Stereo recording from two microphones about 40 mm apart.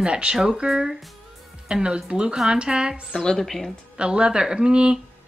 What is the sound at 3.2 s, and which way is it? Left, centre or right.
Speech, centre.